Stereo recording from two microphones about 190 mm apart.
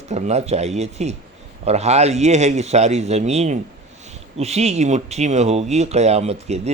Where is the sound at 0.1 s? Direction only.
35° right (ahead or behind).